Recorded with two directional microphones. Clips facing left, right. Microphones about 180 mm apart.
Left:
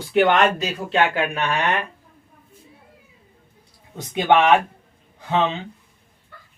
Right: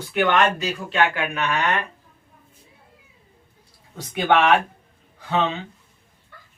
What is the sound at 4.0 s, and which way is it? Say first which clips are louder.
Speech: left 2 dB; 20° left (ahead or behind).